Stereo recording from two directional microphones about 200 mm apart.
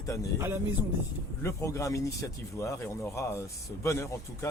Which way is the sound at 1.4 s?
15° left (ahead or behind).